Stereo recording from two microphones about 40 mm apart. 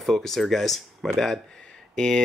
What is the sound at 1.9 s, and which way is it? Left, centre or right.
Speech, centre.